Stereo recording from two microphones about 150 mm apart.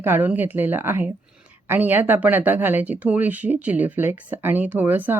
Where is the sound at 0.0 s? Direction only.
15° right (ahead or behind).